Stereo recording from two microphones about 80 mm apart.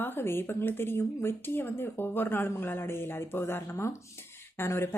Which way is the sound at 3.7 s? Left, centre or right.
Left.